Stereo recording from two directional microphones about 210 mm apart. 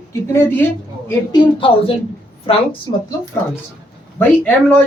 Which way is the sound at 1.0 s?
20° left (ahead or behind).